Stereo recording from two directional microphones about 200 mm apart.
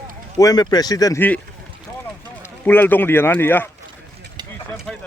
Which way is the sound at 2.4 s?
10° left (ahead or behind).